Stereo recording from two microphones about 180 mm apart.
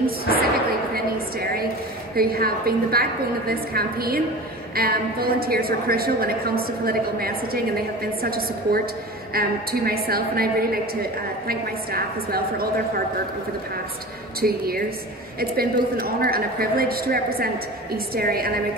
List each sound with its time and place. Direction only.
0.0 s a sound: 55° right (ahead or behind)
2.1 s a woman's voice: 55° right (ahead or behind)
14.4 s a woman's voice: 55° right (ahead or behind)